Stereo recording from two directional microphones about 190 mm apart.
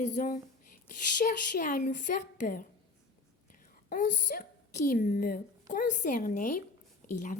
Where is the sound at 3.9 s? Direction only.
45° left (ahead or behind).